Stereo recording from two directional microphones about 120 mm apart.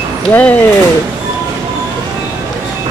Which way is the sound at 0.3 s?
15° left (ahead or behind).